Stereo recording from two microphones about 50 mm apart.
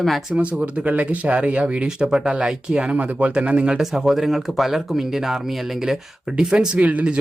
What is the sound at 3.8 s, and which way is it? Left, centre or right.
Speech, centre.